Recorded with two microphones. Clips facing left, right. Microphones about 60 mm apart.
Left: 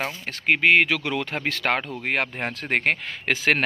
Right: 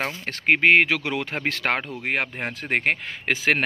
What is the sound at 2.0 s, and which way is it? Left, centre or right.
Speech, centre.